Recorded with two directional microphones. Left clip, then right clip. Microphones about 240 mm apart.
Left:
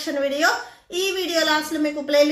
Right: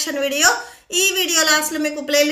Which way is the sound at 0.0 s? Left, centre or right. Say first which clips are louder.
Right 3 dB; centre.